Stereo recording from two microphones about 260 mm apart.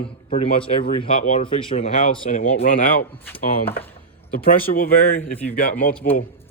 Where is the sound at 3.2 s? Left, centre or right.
Centre.